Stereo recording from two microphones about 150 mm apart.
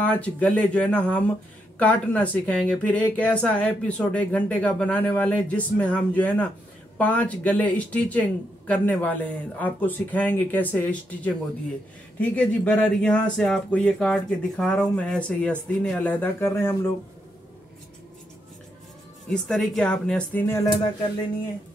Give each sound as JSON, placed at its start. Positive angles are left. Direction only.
{"t": 0.0, "sound": "speech", "side_deg": 10}
{"t": 19.3, "sound": "speech", "side_deg": 5}
{"t": 20.6, "sound": "a sound", "side_deg": 30}